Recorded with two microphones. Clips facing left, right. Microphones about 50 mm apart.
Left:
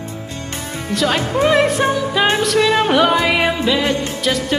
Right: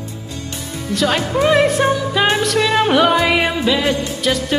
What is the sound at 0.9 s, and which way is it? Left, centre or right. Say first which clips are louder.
Speech: even; centre.